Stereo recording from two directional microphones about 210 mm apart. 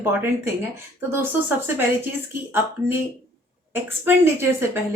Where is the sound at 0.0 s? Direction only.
10° right (ahead or behind).